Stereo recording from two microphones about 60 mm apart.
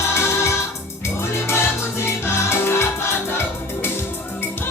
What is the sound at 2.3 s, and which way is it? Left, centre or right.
Music, left.